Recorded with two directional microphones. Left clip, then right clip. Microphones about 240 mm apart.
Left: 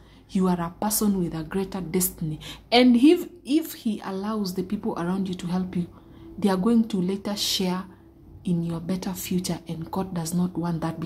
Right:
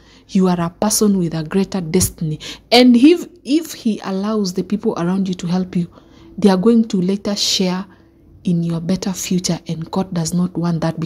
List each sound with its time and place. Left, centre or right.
0.3 s a woman's voice: right